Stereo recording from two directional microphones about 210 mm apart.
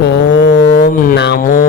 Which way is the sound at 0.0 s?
55° left (ahead or behind).